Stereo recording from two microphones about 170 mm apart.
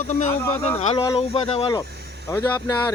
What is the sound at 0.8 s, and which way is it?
Speech, 35° left (ahead or behind).